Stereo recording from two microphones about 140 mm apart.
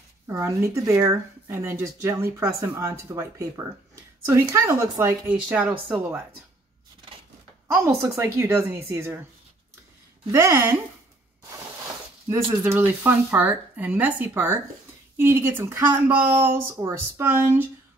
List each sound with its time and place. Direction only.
0.3 s speech: 20° right (ahead or behind)
5.3 s speech: 10° right (ahead or behind)
7.6 s speech: 20° right (ahead or behind)
10.3 s speech: 20° right (ahead or behind)
12.6 s speech: 15° right (ahead or behind)